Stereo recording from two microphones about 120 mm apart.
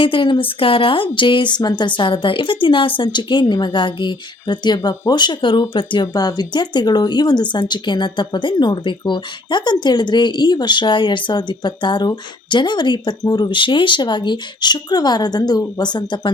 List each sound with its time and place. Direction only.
0.0 s a woman's voice: 45° left (ahead or behind)